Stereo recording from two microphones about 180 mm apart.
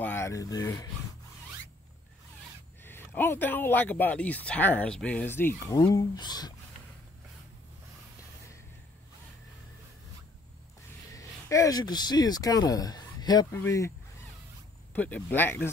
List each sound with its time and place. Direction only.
0.0 s speech: 15° left (ahead or behind)
2.8 s speech: 10° left (ahead or behind)
11.1 s speech: 15° left (ahead or behind)
15.0 s speech: 10° left (ahead or behind)